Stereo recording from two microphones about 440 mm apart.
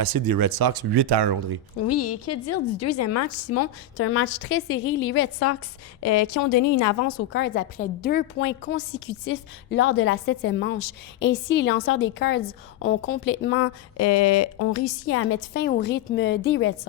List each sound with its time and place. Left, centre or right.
0.0 s speech: right
2.2 s a woman's voice: left
7.3 s speech: left